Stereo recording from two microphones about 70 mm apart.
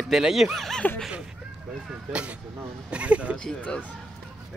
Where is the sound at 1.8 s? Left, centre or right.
Centre.